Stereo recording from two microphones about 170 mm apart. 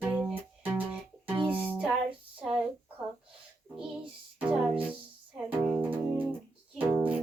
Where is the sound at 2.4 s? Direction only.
5° right (ahead or behind).